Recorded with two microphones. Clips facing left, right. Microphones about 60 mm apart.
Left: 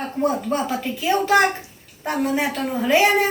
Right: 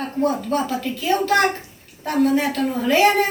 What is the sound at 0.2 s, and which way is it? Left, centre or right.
Speech, centre.